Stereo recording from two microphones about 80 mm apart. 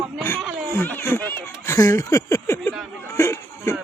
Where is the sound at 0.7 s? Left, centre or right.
Left.